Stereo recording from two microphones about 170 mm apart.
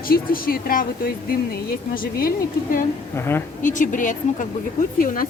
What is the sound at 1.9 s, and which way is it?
Speech, 60° left (ahead or behind).